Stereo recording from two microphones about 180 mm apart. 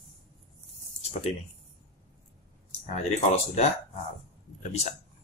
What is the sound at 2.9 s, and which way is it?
Speech, 40° left (ahead or behind).